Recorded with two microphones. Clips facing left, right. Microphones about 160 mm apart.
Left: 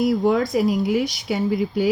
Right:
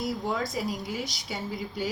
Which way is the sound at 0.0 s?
65° left (ahead or behind).